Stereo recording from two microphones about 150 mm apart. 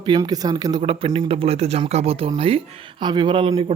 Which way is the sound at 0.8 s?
35° right (ahead or behind).